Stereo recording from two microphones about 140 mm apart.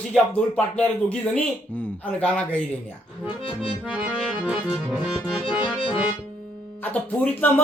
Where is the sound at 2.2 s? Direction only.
10° left (ahead or behind).